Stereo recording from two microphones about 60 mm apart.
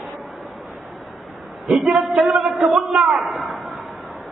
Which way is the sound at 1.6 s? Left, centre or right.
Centre.